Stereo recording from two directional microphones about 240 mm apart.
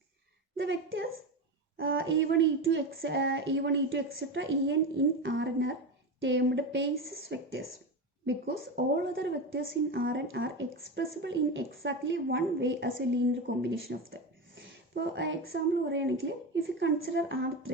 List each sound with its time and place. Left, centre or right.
0.5 s a woman's voice: right